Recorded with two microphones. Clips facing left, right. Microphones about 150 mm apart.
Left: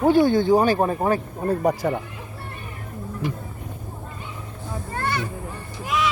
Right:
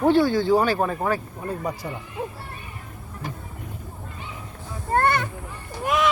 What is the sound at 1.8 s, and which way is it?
Speech, 70° left (ahead or behind).